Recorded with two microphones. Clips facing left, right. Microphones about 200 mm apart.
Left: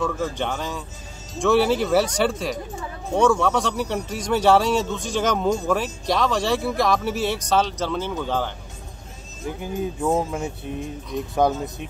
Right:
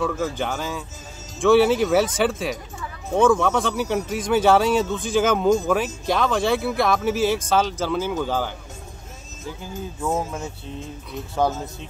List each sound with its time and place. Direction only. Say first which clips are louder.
0.0 s speech: right 1 dB; 5° right (ahead or behind)
9.5 s speech: left 6 dB; 20° left (ahead or behind)